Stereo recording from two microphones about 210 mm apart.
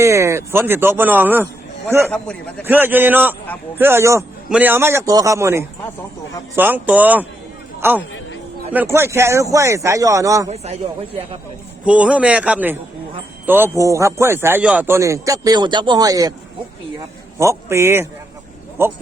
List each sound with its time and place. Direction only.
0.0 s a man's voice: 15° right (ahead or behind)
2.0 s a man's voice: 5° left (ahead or behind)
2.6 s a man's voice: 10° right (ahead or behind)
10.5 s a man's voice: 30° right (ahead or behind)
11.9 s a man's voice: 5° right (ahead or behind)
17.3 s a man's voice: 15° right (ahead or behind)